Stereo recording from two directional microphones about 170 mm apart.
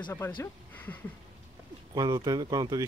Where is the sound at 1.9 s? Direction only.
25° right (ahead or behind).